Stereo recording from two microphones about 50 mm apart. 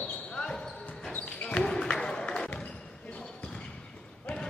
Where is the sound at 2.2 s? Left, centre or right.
Left.